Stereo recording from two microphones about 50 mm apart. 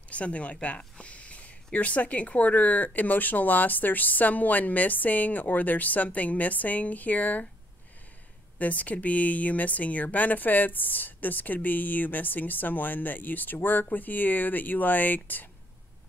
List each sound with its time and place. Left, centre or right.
0.1 s speech: left
8.5 s speech: left